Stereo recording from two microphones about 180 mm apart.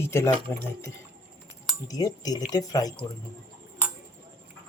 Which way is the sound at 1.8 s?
20° left (ahead or behind).